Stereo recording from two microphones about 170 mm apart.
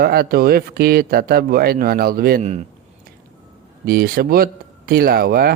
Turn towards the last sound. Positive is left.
turn(degrees=-65)  # may be behind; listen again after turning